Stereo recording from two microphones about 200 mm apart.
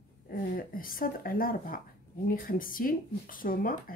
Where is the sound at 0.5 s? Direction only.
45° left (ahead or behind).